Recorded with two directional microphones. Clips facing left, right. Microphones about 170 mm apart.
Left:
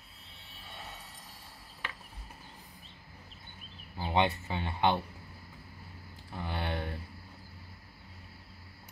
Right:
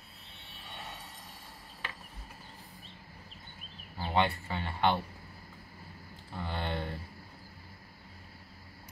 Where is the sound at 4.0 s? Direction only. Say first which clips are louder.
Left 1 dB; 15° left (ahead or behind).